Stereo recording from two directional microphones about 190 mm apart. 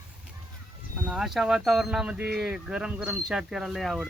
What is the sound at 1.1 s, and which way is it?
Speech, centre (ahead or behind).